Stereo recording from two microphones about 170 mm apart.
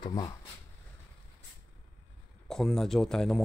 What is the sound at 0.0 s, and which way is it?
Speech, 25° left (ahead or behind).